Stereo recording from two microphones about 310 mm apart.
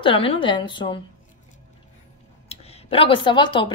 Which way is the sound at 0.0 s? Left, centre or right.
Centre.